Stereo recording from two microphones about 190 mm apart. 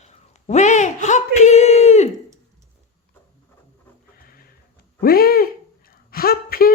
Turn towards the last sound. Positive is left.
turn(degrees=50)  # may be behind; listen again after turning